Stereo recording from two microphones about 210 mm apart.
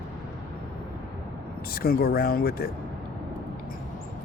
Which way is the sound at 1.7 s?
45° left (ahead or behind).